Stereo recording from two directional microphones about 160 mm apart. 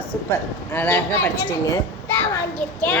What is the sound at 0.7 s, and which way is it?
Speech, 10° left (ahead or behind).